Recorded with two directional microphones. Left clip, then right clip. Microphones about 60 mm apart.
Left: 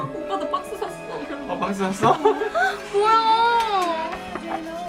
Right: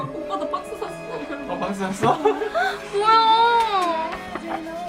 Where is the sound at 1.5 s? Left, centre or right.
Left.